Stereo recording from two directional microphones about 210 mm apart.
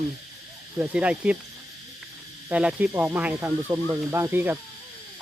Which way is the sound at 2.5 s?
5° right (ahead or behind).